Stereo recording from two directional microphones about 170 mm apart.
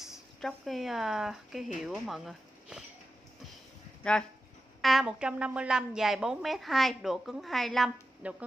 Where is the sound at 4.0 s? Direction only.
5° left (ahead or behind).